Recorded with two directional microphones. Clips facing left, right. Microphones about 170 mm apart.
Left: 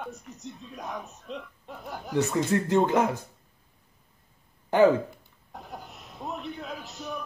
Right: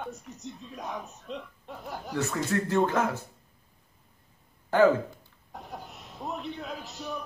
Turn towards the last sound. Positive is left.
turn(degrees=0)  # may be behind; listen again after turning